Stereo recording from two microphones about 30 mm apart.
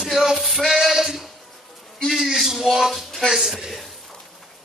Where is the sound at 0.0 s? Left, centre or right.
Centre.